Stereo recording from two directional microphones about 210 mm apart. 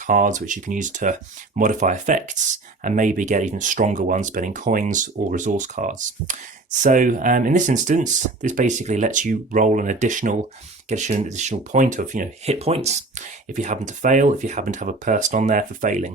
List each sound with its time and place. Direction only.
0.1 s speech: 35° right (ahead or behind)